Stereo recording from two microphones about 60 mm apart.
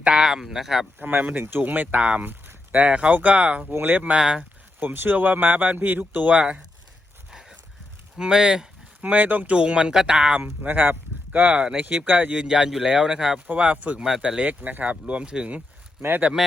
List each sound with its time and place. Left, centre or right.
0.0 s speech: centre
0.9 s speech: right
3.7 s speech: right
4.1 s speech: centre
4.8 s speech: right
7.3 s horse: centre
8.2 s speech: centre
9.0 s speech: right
9.5 s speech: centre
10.4 s speech: right
11.6 s speech: centre
12.0 s speech: right; by 13.4 s centre
13.5 s speech: right
14.6 s speech: right